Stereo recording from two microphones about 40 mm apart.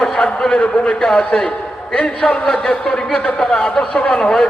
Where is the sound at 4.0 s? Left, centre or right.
Left.